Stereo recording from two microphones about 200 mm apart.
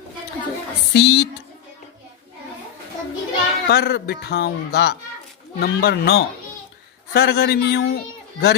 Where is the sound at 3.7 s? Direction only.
55° left (ahead or behind).